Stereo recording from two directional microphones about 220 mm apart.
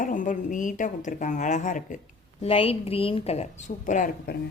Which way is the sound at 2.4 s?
25° left (ahead or behind).